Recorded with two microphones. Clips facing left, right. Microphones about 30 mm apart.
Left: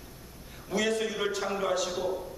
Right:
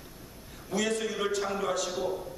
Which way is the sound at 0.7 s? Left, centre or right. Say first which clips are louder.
Left 1 dB; centre.